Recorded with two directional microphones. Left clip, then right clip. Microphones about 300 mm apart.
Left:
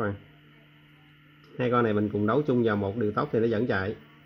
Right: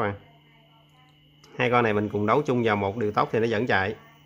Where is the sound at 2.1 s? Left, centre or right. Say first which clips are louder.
Right 3 dB; centre.